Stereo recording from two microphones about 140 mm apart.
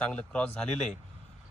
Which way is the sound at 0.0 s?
10° left (ahead or behind).